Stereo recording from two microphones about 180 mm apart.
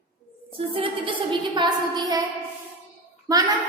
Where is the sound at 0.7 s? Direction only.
30° right (ahead or behind).